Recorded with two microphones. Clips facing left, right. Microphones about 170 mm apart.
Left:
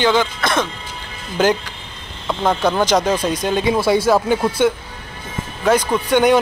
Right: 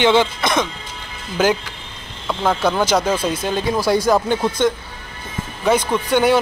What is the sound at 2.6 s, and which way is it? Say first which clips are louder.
Speech: left 2 dB; 15° left (ahead or behind).